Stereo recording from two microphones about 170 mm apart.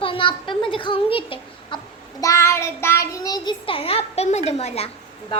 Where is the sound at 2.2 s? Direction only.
15° left (ahead or behind).